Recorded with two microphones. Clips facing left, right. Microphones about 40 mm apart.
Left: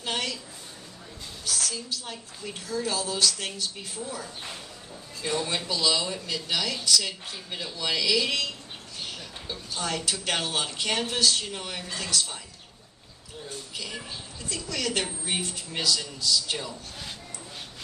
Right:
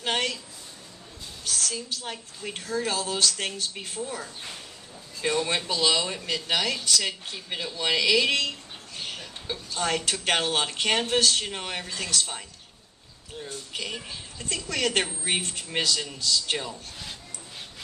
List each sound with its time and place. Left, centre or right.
0.0 s a sound: right
1.6 s speech: right
9.7 s speech: right
13.5 s speech: right